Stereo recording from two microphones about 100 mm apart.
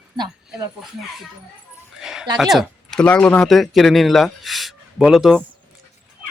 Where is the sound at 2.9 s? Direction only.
10° left (ahead or behind).